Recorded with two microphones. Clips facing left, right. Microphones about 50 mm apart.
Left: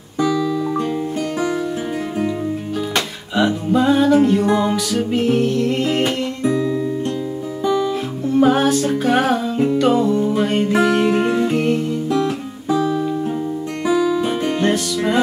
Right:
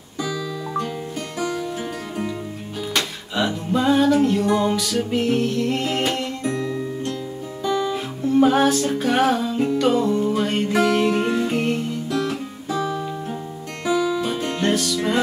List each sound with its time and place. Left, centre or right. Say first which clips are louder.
0.2 s music: left 9 dB; centre
3.3 s music: left 5 dB; centre
7.6 s guitar: left 4 dB; centre
7.9 s music: left 1 dB; centre
12.1 s guitar: left 5 dB; centre
12.7 s music: left 6 dB; centre